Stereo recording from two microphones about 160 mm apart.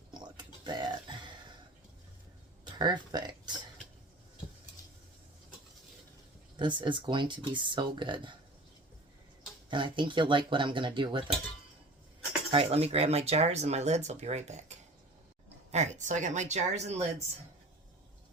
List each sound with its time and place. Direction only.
0.1 s a sound: 25° right (ahead or behind)
2.7 s speech: 25° right (ahead or behind)
6.6 s speech: 30° right (ahead or behind)
9.6 s speech: 30° right (ahead or behind)
12.5 s speech: 40° right (ahead or behind)